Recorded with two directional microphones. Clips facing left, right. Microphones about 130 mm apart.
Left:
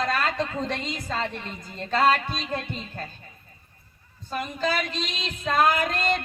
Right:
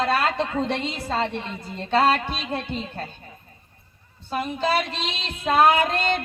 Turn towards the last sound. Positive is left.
turn(degrees=-30)  # may be behind; listen again after turning